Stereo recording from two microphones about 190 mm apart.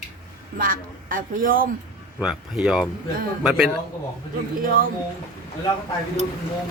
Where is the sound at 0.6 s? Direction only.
45° right (ahead or behind).